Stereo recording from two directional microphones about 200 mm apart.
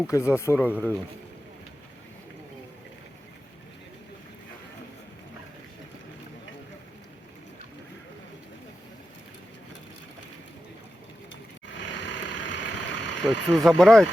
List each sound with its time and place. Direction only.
0.1 s speech: 15° left (ahead or behind)
11.7 s vehicle: 65° left (ahead or behind)
13.5 s speech: centre (ahead or behind)